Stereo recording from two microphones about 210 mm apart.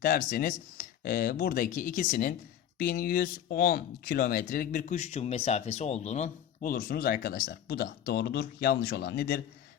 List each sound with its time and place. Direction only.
0.0 s speech: 45° left (ahead or behind)